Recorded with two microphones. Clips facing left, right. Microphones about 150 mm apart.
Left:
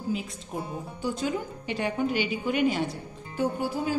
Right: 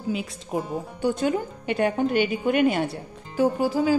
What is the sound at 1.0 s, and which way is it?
A woman's voice, 55° right (ahead or behind).